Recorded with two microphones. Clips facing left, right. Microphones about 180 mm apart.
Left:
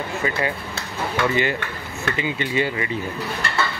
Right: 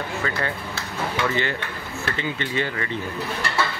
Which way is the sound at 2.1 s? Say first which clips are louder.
Left 4 dB; 10° left (ahead or behind).